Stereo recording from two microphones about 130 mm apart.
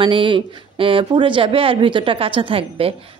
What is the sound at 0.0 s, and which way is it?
Speech, 40° right (ahead or behind).